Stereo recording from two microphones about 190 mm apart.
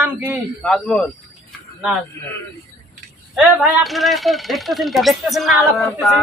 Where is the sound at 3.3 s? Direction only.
Centre (ahead or behind).